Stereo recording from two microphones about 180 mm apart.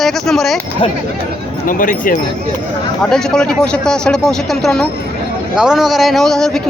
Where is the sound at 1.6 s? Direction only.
50° left (ahead or behind).